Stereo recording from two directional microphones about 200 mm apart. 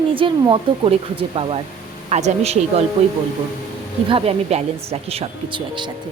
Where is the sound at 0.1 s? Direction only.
25° right (ahead or behind).